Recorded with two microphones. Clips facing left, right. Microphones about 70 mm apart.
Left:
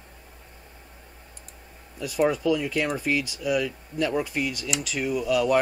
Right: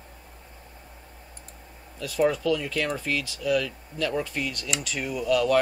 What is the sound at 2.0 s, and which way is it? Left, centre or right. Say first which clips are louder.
Speech: even; centre.